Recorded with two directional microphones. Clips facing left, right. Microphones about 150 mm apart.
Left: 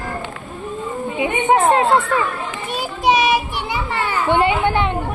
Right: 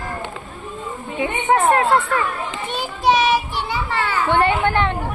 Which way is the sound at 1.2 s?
20° left (ahead or behind).